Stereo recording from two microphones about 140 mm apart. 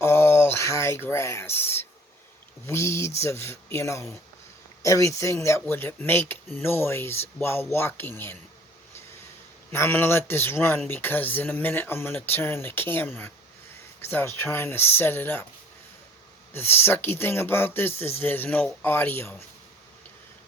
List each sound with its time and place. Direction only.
0.0 s a sound: 15° left (ahead or behind)
2.6 s speech: 20° left (ahead or behind)
9.7 s speech: 15° left (ahead or behind)
16.5 s speech: 15° left (ahead or behind)